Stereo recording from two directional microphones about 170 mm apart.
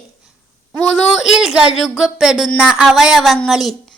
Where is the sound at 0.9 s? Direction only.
Centre (ahead or behind).